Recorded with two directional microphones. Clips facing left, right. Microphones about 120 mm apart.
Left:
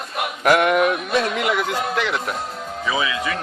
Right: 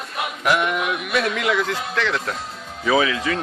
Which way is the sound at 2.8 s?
40° right (ahead or behind).